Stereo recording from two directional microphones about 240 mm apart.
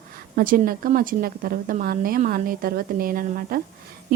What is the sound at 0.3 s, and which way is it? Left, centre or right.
A woman's voice, right.